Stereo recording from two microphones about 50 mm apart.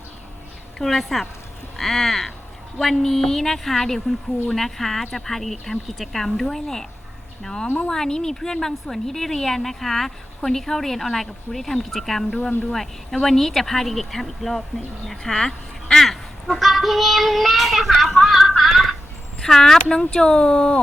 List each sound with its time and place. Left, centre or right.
0.8 s a woman's voice: centre
12.4 s speech: left
12.7 s a woman's voice: centre
19.4 s speech: centre